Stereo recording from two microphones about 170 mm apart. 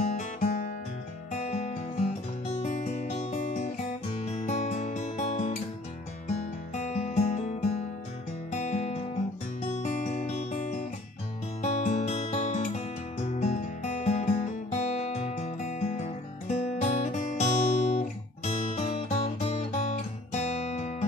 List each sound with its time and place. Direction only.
0.0 s music: 45° left (ahead or behind)
1.3 s music: 40° left (ahead or behind)
6.7 s music: 45° left (ahead or behind)